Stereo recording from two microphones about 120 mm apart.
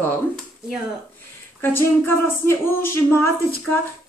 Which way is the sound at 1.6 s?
20° left (ahead or behind).